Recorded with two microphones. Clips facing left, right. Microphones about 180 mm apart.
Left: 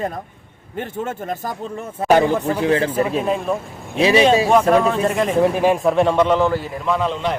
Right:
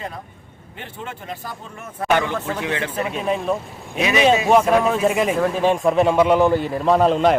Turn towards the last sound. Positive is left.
turn(degrees=-45)  # may be behind; listen again after turning